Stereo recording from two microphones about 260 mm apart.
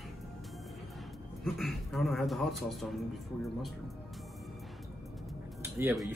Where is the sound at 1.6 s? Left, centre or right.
Centre.